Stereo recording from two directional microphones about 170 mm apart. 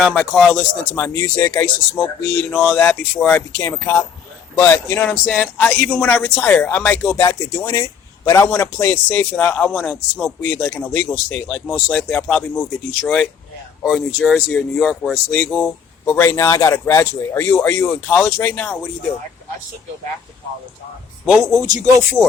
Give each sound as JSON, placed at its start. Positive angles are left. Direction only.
{"t": 0.0, "sound": "speech", "side_deg": 0}
{"t": 21.2, "sound": "speech", "side_deg": 0}
{"t": 21.5, "sound": "speech", "side_deg": -20}